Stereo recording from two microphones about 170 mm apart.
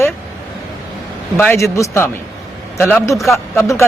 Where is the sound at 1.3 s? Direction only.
15° left (ahead or behind).